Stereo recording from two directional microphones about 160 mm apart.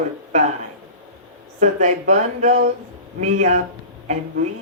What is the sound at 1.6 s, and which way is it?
Speech, 50° right (ahead or behind).